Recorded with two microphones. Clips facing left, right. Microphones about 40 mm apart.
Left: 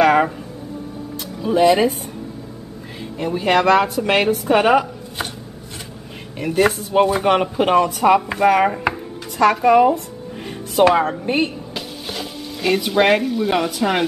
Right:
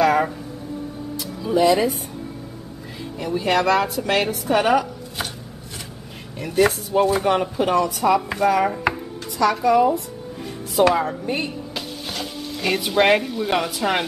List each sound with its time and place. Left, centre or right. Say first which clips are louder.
0.0 s a sound: left 3 dB; left
1.4 s speech: left 3 dB; left
3.2 s a woman's voice: left 3 dB; left
6.3 s speech: left 2 dB; left
11.7 s frying: left 1 dB; centre